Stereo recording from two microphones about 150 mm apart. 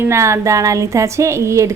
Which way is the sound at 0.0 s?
20° right (ahead or behind).